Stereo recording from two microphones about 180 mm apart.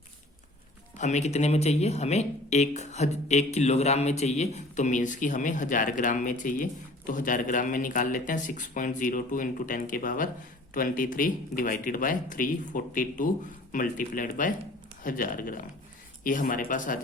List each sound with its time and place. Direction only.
0.9 s speech: 40° left (ahead or behind)